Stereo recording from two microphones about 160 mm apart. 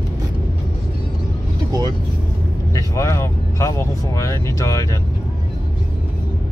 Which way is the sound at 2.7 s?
20° left (ahead or behind).